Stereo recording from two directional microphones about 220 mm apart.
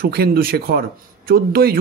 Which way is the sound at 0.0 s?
45° right (ahead or behind).